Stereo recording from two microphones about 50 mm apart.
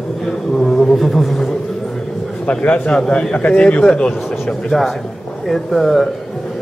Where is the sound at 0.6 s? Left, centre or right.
Centre.